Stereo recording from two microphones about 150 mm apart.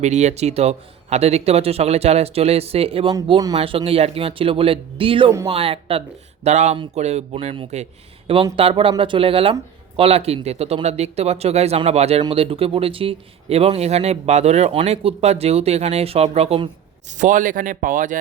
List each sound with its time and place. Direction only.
0.0 s speech: 50° right (ahead or behind)
6.4 s speech: 50° right (ahead or behind)
17.1 s a man's voice: 55° right (ahead or behind)